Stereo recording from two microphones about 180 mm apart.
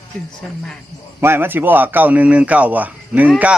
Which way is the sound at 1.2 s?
10° right (ahead or behind).